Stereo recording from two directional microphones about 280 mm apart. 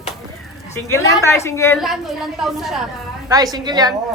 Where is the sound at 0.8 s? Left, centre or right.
Centre.